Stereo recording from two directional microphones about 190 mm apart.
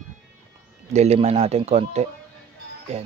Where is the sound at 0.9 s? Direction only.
35° right (ahead or behind).